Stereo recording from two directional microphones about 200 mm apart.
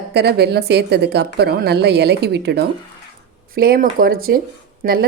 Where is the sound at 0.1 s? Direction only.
55° right (ahead or behind).